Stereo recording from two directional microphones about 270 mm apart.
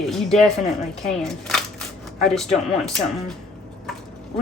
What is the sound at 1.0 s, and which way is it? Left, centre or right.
Speech, centre.